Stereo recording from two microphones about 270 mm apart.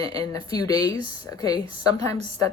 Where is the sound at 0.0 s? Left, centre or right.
Centre.